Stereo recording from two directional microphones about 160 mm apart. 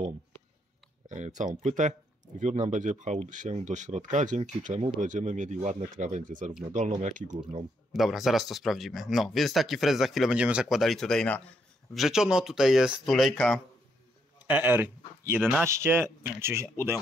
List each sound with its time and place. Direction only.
1.0 s speech: 50° right (ahead or behind)
5.0 s speech: 50° right (ahead or behind)
7.9 s speech: centre (ahead or behind)
14.4 s speech: 10° right (ahead or behind)